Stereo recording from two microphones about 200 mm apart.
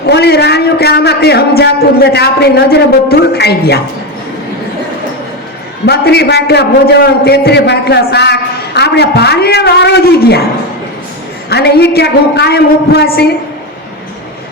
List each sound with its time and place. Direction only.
0.0 s a man's voice: 55° left (ahead or behind)
5.8 s a man's voice: 55° left (ahead or behind)
11.4 s a man's voice: 55° left (ahead or behind)